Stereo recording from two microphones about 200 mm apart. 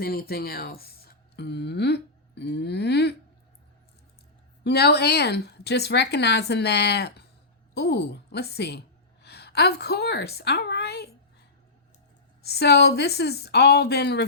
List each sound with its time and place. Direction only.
0.0 s speech: 50° left (ahead or behind)
4.6 s a woman's voice: 55° left (ahead or behind)
12.4 s speech: 55° left (ahead or behind)